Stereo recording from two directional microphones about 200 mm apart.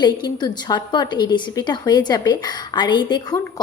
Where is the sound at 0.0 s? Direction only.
20° left (ahead or behind).